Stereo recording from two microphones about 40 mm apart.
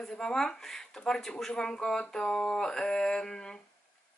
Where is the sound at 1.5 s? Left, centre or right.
Centre.